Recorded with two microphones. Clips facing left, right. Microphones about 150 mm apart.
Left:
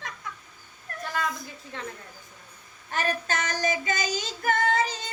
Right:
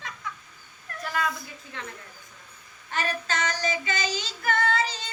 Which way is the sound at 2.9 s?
50° left (ahead or behind).